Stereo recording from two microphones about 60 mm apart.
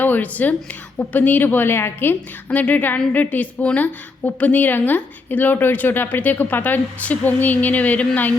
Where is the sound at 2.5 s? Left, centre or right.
Left.